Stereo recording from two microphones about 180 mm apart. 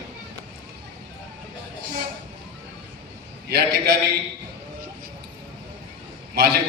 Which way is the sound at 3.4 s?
60° right (ahead or behind).